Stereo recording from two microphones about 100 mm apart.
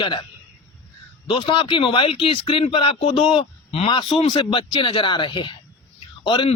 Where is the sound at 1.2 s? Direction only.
60° left (ahead or behind); by 3.1 s 75° left (ahead or behind).